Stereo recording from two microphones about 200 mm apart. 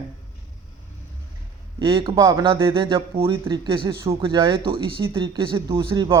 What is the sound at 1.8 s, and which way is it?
Speech, 25° right (ahead or behind).